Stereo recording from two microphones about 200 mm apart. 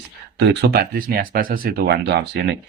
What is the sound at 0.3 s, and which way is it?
Speech, 55° right (ahead or behind).